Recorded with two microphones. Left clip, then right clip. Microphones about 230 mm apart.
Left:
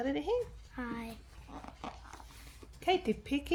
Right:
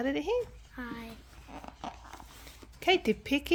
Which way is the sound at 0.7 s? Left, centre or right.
Centre.